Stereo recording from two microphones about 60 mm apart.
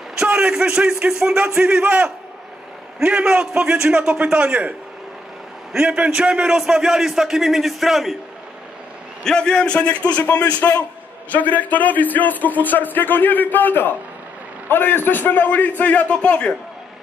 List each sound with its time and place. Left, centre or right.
0.2 s a man's voice: centre
5.9 s a man's voice: centre
9.2 s a man's voice: centre